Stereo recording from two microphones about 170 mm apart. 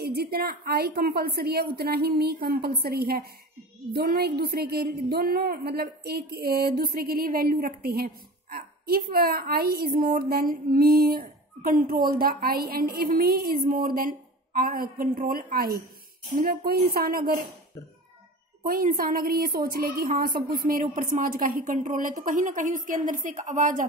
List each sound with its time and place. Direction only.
0.0 s a woman's voice: 65° right (ahead or behind)
18.6 s a woman's voice: 55° right (ahead or behind)